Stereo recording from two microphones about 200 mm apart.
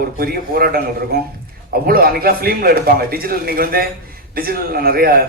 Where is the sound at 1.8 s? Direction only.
50° right (ahead or behind).